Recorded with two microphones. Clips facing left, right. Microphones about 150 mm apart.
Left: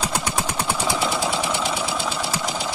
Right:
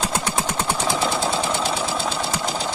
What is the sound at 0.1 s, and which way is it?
Engine, 25° right (ahead or behind).